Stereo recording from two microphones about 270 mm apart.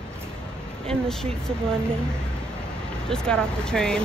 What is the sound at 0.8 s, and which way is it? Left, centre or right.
Speech, centre.